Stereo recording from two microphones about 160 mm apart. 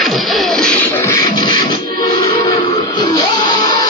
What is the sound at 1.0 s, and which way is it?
Music, 20° left (ahead or behind).